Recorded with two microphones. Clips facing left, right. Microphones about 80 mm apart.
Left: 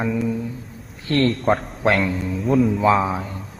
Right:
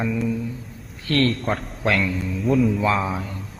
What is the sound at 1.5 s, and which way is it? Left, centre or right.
Speech, left.